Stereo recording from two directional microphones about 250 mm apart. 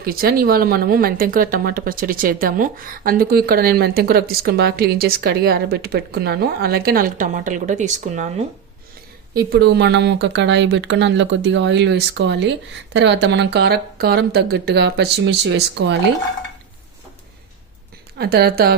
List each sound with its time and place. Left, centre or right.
0.0 s speech: right
9.5 s speech: right
18.2 s speech: right